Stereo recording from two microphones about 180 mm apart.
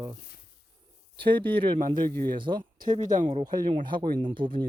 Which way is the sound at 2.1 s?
55° right (ahead or behind).